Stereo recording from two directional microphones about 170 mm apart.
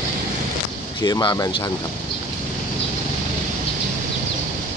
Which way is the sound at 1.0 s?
25° left (ahead or behind).